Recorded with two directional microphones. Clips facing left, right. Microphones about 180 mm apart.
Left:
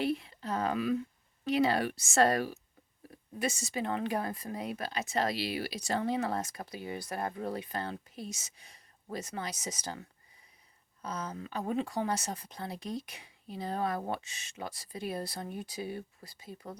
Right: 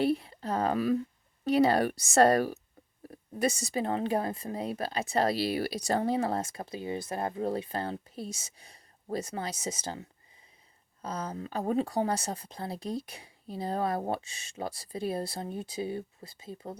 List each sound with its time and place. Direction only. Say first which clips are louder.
0.0 s speech: right 4 dB; 35° right (ahead or behind)